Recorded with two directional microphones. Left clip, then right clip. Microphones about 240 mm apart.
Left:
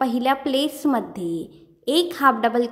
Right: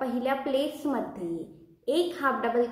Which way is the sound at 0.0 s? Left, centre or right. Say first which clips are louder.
Left 7 dB; left.